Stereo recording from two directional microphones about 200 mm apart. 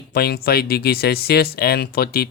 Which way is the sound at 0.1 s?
50° left (ahead or behind).